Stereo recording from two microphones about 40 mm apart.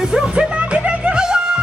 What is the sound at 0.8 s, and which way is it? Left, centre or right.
Music, right.